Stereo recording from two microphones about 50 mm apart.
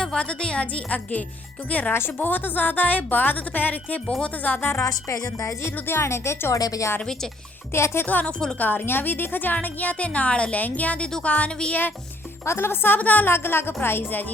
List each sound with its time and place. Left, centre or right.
0.0 s a woman's voice: centre
2.1 s a woman's voice: left
4.8 s a woman's voice: left
7.7 s speech: left
8.0 s a woman's voice: left
12.5 s speech: left
13.0 s a woman's voice: left
13.2 s speech: left